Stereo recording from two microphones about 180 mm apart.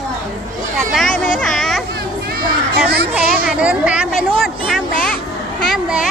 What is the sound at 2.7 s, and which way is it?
Children playing, 60° right (ahead or behind).